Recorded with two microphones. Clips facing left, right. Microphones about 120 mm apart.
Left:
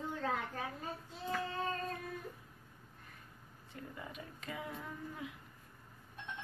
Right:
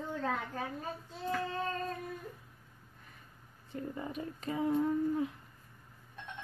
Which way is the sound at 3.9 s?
35° right (ahead or behind).